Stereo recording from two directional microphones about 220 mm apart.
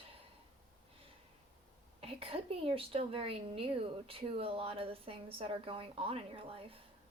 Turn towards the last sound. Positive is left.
turn(degrees=-25)  # may be behind; listen again after turning